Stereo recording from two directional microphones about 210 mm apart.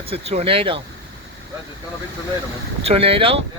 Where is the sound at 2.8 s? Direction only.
25° right (ahead or behind).